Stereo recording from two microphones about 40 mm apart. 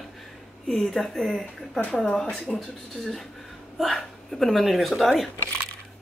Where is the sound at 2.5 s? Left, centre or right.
Centre.